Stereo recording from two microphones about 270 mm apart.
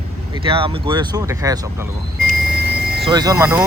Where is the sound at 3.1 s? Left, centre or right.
Centre.